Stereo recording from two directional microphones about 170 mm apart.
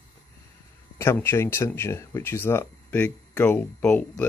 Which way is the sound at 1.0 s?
15° left (ahead or behind).